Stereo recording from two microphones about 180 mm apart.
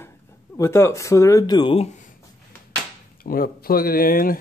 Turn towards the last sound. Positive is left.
turn(degrees=55)  # may be behind; listen again after turning